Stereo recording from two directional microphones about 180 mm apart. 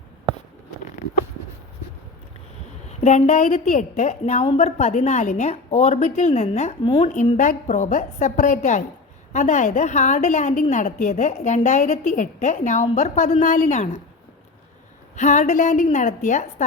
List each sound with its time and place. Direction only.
3.0 s a woman's voice: 40° left (ahead or behind)
7.1 s a woman's voice: 45° left (ahead or behind)
15.1 s a woman's voice: 45° left (ahead or behind)